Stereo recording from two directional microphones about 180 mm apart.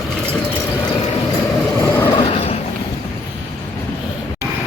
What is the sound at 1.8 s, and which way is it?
Train, 15° left (ahead or behind).